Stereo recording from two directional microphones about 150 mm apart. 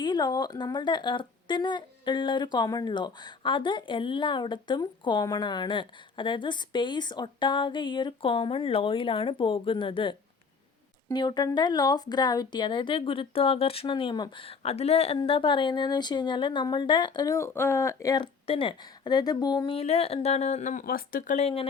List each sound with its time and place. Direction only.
0.0 s a woman's voice: 30° left (ahead or behind)
18.4 s speech: 35° left (ahead or behind)
19.7 s speech: 45° left (ahead or behind); by 21.3 s 70° left (ahead or behind)
21.3 s a woman's voice: 40° left (ahead or behind)